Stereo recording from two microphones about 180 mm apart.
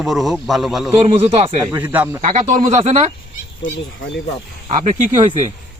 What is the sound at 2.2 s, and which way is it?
Speech, 40° right (ahead or behind).